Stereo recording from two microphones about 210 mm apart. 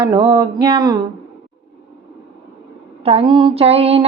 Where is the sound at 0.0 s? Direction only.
20° right (ahead or behind).